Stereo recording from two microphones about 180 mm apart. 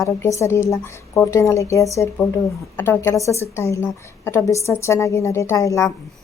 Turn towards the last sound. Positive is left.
turn(degrees=20)  # may be behind; listen again after turning